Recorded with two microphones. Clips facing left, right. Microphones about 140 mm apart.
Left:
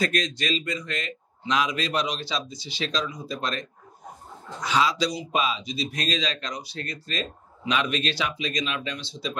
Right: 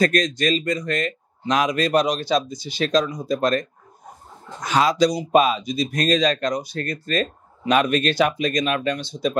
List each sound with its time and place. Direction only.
0.0 s speech: 45° right (ahead or behind)